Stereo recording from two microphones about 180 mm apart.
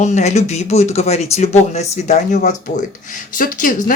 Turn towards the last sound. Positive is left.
turn(degrees=50)  # may be behind; listen again after turning